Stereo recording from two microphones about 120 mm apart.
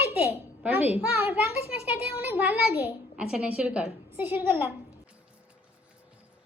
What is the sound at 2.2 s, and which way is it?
A woman's voice, 15° right (ahead or behind).